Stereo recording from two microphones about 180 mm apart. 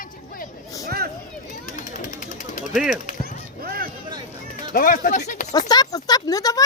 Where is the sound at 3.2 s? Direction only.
55° right (ahead or behind).